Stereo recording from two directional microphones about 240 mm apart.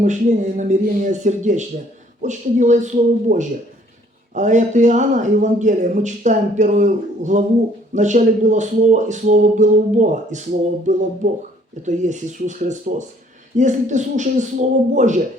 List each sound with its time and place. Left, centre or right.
0.0 s speech: right
11.9 s speech: right